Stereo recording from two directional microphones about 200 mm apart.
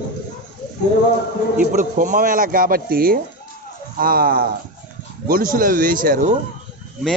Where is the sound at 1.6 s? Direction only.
40° right (ahead or behind).